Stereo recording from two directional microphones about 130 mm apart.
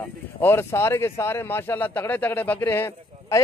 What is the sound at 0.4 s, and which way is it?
Speech, 15° left (ahead or behind).